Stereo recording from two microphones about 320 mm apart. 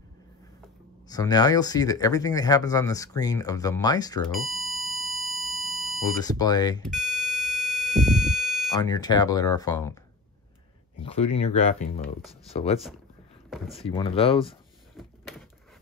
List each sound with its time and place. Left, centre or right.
1.0 s speech: centre
4.6 s sine wave: centre
6.0 s speech: centre
6.9 s buzzer: centre
8.8 s speech: centre
11.0 s speech: centre
15.0 s a sound: centre